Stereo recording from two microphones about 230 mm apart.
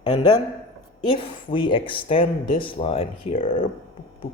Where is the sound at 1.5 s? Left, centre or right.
Left.